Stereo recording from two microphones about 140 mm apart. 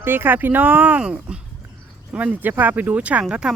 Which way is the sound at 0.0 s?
15° right (ahead or behind).